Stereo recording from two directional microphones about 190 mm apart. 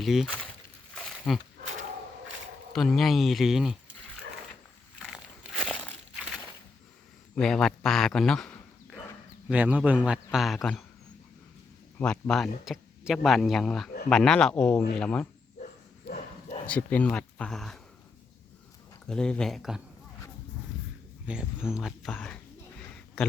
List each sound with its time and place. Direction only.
0.0 s speech: centre (ahead or behind)
0.9 s a sound: centre (ahead or behind)
2.7 s speech: centre (ahead or behind)
4.9 s a sound: 5° right (ahead or behind)
7.3 s speech: centre (ahead or behind)
9.5 s a man's voice: 10° right (ahead or behind)
11.9 s speech: 10° left (ahead or behind)
16.1 s bow-wow: 60° left (ahead or behind)
16.6 s speech: 5° left (ahead or behind)
19.0 s speech: 5° left (ahead or behind)
21.2 s speech: 5° right (ahead or behind)